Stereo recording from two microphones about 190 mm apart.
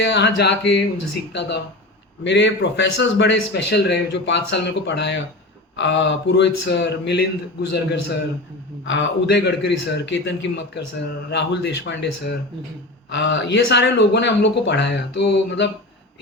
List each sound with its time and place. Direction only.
0.0 s a man's voice: 65° left (ahead or behind)
8.8 s a man's voice: 75° left (ahead or behind)